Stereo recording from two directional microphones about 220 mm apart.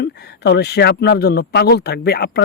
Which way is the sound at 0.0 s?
50° left (ahead or behind).